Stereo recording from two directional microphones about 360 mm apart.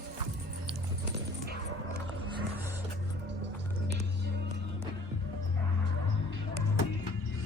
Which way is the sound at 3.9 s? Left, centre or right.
Right.